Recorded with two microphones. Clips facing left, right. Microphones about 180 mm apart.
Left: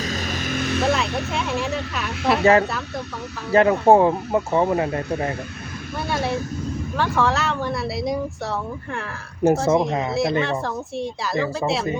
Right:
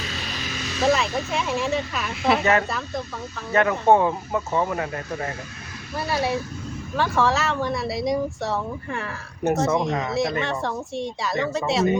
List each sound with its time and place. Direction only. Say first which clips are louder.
0.0 s vehicle: left 6 dB; 45° left (ahead or behind)
0.8 s vehicle: right 2 dB; centre (ahead or behind)
1.3 s speech: even; centre (ahead or behind)
2.4 s speech: left 10 dB; 30° left (ahead or behind)
2.6 s speech: even; centre (ahead or behind)
3.5 s speech: left 4 dB; 30° left (ahead or behind)
6.0 s speech: even; centre (ahead or behind)
9.5 s speech: left 3 dB; 30° left (ahead or behind)
10.4 s speech: left 2 dB; centre (ahead or behind)